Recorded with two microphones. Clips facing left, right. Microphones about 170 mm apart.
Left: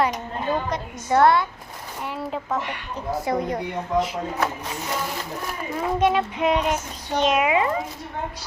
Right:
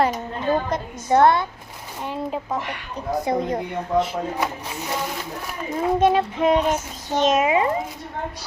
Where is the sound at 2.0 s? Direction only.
20° right (ahead or behind).